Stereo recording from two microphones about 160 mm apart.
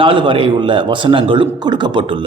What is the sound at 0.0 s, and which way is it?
A man's voice, 30° right (ahead or behind).